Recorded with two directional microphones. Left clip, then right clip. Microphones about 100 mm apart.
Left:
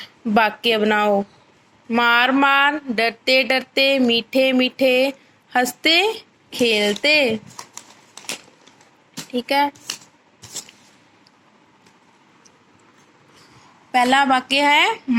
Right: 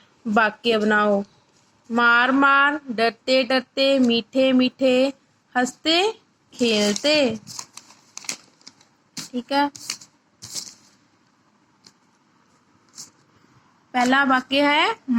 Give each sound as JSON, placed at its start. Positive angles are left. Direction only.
{"t": 0.0, "sound": "a sound", "side_deg": 15}
{"t": 9.2, "sound": "speech", "side_deg": 15}
{"t": 13.9, "sound": "a woman's voice", "side_deg": 25}